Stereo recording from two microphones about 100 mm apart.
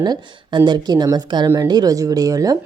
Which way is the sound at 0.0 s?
45° right (ahead or behind).